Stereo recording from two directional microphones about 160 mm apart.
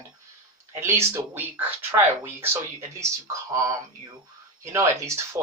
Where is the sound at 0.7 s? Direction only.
15° right (ahead or behind).